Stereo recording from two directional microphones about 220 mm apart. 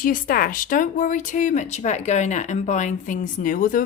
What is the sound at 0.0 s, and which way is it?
Speech, 40° left (ahead or behind).